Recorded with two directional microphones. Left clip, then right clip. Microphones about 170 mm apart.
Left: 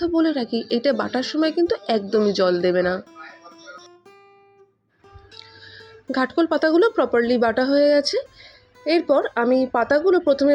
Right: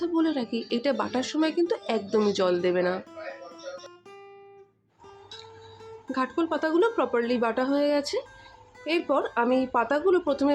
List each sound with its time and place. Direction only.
0.0 s speech: 15° left (ahead or behind)
6.1 s speech: 30° left (ahead or behind)